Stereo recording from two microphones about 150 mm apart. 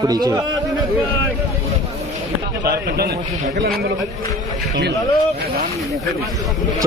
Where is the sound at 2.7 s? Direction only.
90° right.